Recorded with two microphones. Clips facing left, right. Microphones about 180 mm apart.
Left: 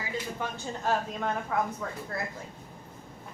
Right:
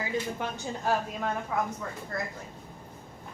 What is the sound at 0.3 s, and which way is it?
Speech, 15° right (ahead or behind).